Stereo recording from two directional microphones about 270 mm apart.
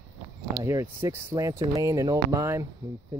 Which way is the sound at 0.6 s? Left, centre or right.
Centre.